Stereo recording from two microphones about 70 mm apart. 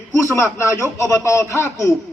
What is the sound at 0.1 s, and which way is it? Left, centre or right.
A man's voice, left.